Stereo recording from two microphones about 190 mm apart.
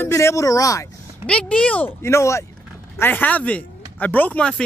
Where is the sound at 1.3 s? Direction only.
5° left (ahead or behind).